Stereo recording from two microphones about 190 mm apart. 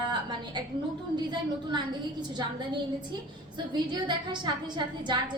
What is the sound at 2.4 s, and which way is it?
A woman's voice, 25° right (ahead or behind).